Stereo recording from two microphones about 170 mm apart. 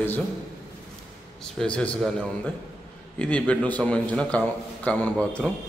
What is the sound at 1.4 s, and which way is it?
A man's voice, 5° left (ahead or behind).